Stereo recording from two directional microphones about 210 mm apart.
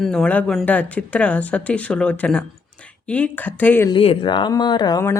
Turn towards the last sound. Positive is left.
turn(degrees=15)  # may be behind; listen again after turning